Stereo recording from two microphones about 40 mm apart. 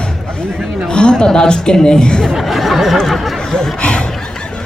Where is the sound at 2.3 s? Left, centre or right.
Centre.